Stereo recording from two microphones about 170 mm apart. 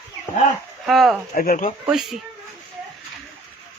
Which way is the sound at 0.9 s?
Centre (ahead or behind).